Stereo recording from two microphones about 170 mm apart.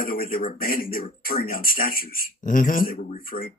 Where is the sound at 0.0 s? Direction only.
60° left (ahead or behind).